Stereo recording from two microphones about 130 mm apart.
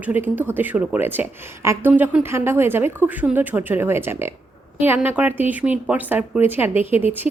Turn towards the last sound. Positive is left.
turn(degrees=-15)  # may be behind; listen again after turning